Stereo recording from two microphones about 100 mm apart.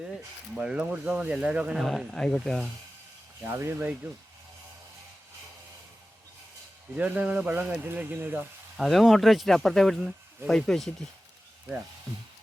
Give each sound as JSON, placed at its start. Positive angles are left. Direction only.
{"t": 0.5, "sound": "speech", "side_deg": -10}
{"t": 3.4, "sound": "speech", "side_deg": -25}
{"t": 6.9, "sound": "speech", "side_deg": -15}
{"t": 8.8, "sound": "speech", "side_deg": 0}